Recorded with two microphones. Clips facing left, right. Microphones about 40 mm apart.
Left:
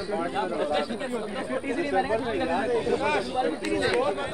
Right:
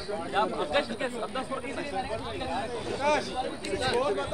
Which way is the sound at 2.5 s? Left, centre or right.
Left.